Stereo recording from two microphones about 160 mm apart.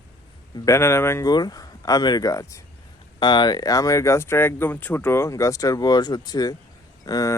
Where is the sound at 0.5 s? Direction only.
20° left (ahead or behind).